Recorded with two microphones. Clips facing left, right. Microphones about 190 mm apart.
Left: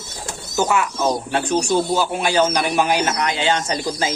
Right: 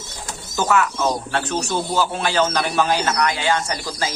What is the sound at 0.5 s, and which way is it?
Speech, 15° left (ahead or behind).